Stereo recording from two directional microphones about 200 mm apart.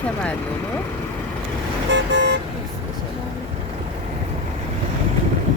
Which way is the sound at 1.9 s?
60° right (ahead or behind).